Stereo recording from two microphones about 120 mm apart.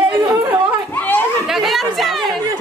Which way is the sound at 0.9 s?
15° left (ahead or behind).